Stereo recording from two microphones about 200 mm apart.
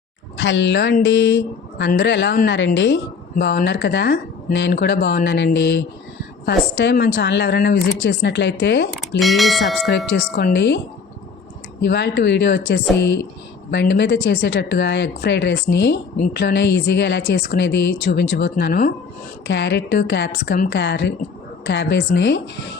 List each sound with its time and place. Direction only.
0.3 s speech: 65° left (ahead or behind)
9.0 s speech: centre (ahead or behind)
10.3 s speech: 55° left (ahead or behind)
11.8 s speech: 55° left (ahead or behind)
19.5 s speech: 60° left (ahead or behind)